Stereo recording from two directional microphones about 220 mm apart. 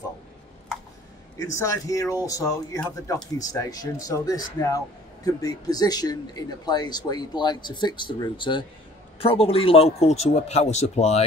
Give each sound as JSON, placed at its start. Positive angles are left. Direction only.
{"t": 1.4, "sound": "speech", "side_deg": 15}